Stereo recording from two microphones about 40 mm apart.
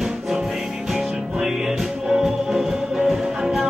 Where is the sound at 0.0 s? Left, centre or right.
Centre.